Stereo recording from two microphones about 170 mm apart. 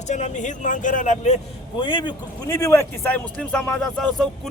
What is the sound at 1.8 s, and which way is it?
A man's voice, 30° left (ahead or behind).